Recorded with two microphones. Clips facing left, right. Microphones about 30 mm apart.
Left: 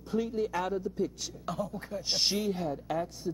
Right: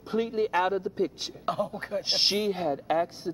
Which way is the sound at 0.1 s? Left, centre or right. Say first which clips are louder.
Right 4 dB; right.